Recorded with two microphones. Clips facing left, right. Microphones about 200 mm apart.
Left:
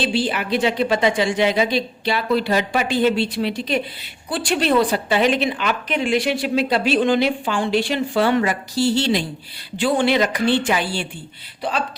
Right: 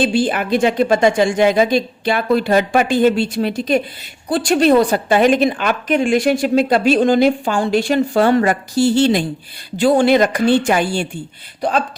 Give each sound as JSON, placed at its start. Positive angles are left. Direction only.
{"t": 0.0, "sound": "a woman's voice", "side_deg": -50}